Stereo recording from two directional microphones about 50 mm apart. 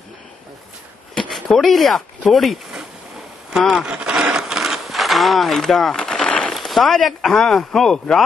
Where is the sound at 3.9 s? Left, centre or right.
Right; by 5.9 s centre.